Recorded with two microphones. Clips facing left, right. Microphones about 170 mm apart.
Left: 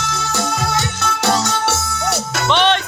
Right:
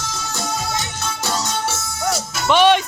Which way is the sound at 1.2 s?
75° left (ahead or behind).